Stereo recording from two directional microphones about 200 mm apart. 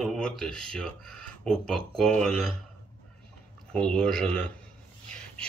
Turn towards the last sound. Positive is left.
turn(degrees=5)  # may be behind; listen again after turning